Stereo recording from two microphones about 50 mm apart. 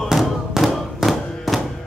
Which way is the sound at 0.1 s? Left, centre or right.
Centre.